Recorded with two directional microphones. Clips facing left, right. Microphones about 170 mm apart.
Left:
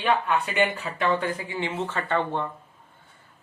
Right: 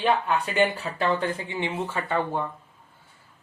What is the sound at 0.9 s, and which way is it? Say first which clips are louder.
Speech: left 1 dB; 30° right (ahead or behind).